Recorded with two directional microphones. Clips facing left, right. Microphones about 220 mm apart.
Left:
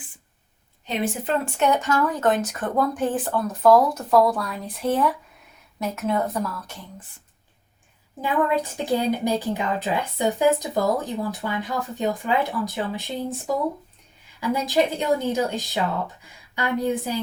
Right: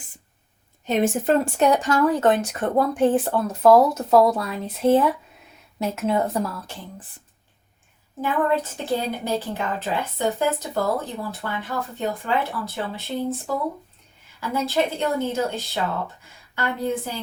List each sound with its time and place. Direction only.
0.9 s speech: 45° right (ahead or behind); by 6.7 s 25° right (ahead or behind)
8.2 s a woman's voice: 15° left (ahead or behind)
14.4 s a woman's voice: 15° left (ahead or behind)